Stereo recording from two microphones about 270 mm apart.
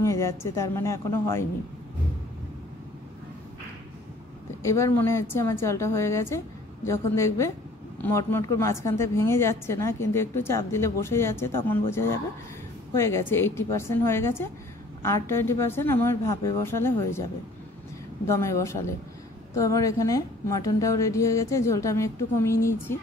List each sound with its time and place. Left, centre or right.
0.0 s a woman's voice: centre
4.6 s a woman's voice: centre
12.9 s a woman's voice: centre
18.3 s a woman's voice: centre